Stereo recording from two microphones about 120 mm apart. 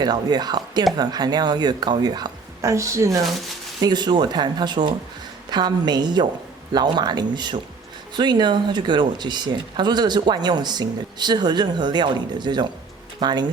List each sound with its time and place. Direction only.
0.0 s speech: 35° right (ahead or behind)